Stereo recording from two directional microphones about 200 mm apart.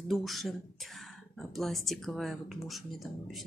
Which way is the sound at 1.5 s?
Centre (ahead or behind).